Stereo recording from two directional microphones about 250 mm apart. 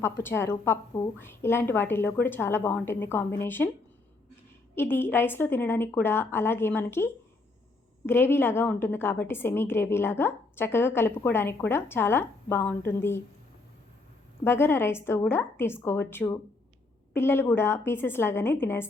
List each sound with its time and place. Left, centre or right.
0.0 s a woman's voice: centre
4.7 s a woman's voice: centre
14.4 s a woman's voice: centre